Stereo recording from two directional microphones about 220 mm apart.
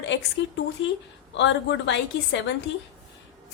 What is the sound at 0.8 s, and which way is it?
A woman's voice, 55° left (ahead or behind).